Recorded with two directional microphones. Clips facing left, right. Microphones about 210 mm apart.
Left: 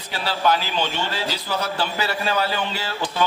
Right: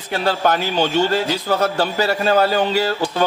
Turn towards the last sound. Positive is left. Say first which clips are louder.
# right 6 dB
turn(degrees=-40)  # may be behind; listen again after turning